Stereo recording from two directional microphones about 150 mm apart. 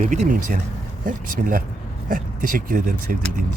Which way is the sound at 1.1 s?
65° right (ahead or behind).